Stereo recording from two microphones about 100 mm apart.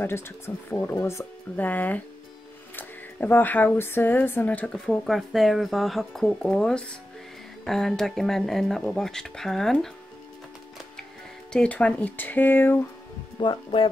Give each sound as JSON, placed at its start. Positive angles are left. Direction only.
{"t": 0.7, "sound": "speech", "side_deg": 20}
{"t": 1.6, "sound": "speech", "side_deg": 15}
{"t": 11.5, "sound": "speech", "side_deg": 10}
{"t": 13.4, "sound": "speech", "side_deg": 50}